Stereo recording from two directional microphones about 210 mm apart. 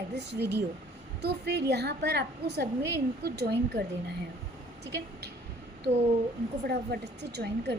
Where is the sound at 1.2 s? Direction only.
50° right (ahead or behind).